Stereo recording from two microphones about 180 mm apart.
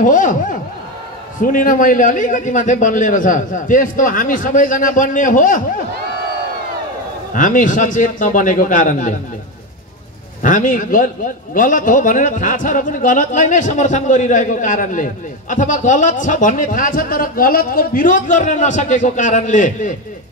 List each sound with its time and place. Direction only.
0.0 s a man's voice: 45° left (ahead or behind)
7.3 s a man's voice: 45° left (ahead or behind)
10.4 s a man's voice: 45° left (ahead or behind)